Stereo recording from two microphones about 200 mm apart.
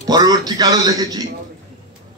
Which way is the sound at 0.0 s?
20° right (ahead or behind).